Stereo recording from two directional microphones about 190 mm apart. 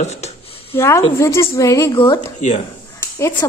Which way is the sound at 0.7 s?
15° left (ahead or behind).